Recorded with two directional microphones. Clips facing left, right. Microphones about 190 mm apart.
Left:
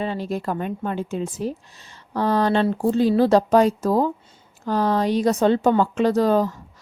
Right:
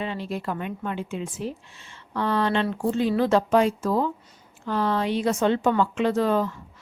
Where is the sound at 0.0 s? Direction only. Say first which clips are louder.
Left 4 dB; 40° left (ahead or behind).